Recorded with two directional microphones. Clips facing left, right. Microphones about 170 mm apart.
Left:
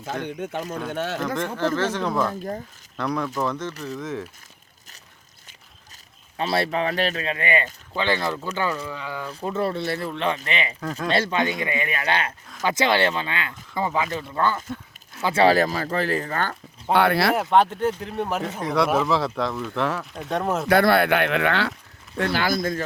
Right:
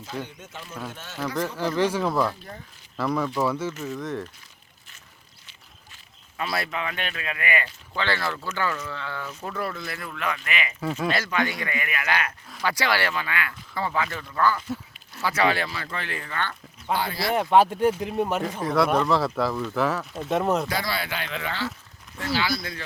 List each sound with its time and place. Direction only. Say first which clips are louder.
0.3 s speech: left 12 dB; 60° left (ahead or behind)
1.5 s speech: right 1 dB; 10° right (ahead or behind)
6.3 s speech: left 6 dB; 30° left (ahead or behind); by 9.2 s 15° left (ahead or behind)
9.4 s speech: left 8 dB; 25° left (ahead or behind)
10.8 s speech: right 1 dB; 5° right (ahead or behind)
11.1 s speech: left 3 dB; 25° left (ahead or behind)
16.9 s speech: left 7 dB; 65° left (ahead or behind)
17.3 s speech: even; centre (ahead or behind)
18.1 s speech: right 1 dB; centre (ahead or behind)
20.7 s speech: left 12 dB; 60° left (ahead or behind)
22.2 s speech: left 4 dB; 55° left (ahead or behind)